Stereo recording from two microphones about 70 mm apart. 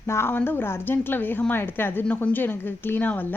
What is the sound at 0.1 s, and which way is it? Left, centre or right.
A woman's voice, left.